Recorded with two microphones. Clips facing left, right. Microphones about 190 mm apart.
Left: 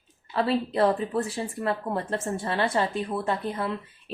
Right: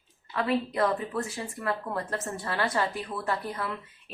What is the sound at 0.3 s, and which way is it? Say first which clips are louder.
Speech: left 3 dB; 30° left (ahead or behind).